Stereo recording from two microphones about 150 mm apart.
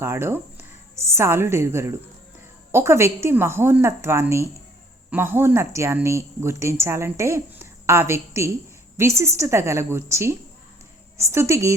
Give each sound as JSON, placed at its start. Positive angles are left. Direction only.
{"t": 0.0, "sound": "a woman's voice", "side_deg": -15}